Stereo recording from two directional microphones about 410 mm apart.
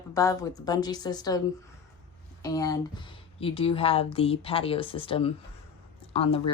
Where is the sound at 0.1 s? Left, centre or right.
Centre.